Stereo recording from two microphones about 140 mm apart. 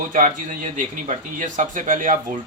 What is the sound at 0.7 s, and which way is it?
Speech, 70° right (ahead or behind).